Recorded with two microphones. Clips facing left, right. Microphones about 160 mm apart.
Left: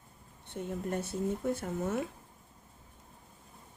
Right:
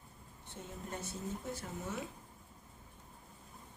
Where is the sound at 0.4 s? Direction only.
60° left (ahead or behind).